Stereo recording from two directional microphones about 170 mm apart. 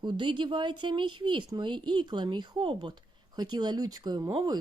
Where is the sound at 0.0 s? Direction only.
30° right (ahead or behind).